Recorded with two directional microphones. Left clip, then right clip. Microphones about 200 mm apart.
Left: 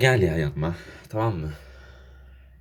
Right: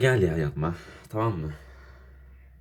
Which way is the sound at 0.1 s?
40° right (ahead or behind).